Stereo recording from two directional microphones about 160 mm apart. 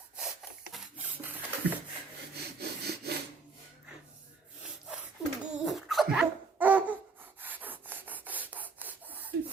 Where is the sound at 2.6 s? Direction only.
85° right.